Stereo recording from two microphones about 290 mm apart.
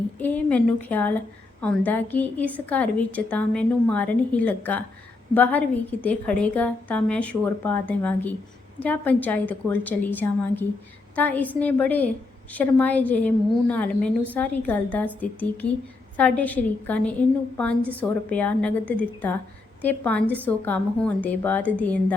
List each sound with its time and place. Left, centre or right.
0.2 s a woman's voice: centre